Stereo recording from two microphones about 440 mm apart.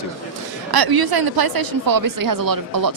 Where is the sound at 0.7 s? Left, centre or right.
Right.